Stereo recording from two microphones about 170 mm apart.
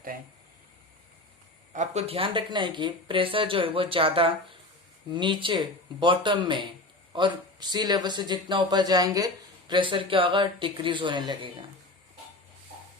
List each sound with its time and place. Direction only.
1.7 s speech: 45° right (ahead or behind); by 11.3 s 25° right (ahead or behind)